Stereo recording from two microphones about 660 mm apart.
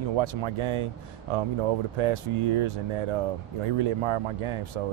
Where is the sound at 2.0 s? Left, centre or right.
Right.